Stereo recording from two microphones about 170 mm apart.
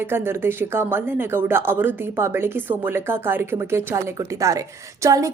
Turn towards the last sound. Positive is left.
turn(degrees=-20)  # may be behind; listen again after turning